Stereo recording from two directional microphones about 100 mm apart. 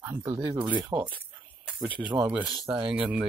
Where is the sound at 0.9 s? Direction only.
55° right (ahead or behind).